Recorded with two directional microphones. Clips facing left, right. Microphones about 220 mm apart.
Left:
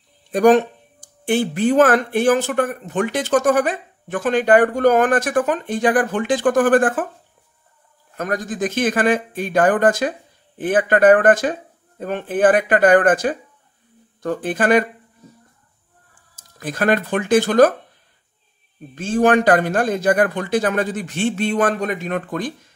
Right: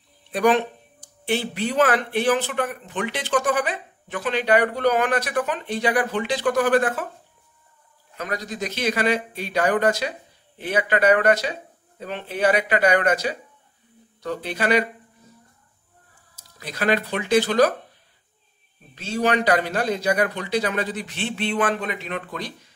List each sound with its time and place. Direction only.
0.3 s speech: 45° left (ahead or behind)
8.2 s speech: 50° left (ahead or behind)
16.3 s speech: 50° left (ahead or behind)
18.9 s speech: 50° left (ahead or behind)